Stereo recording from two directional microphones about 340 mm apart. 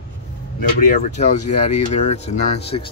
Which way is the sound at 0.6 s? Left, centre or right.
Left.